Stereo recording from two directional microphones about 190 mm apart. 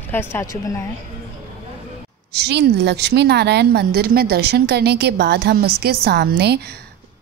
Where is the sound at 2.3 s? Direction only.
60° right (ahead or behind).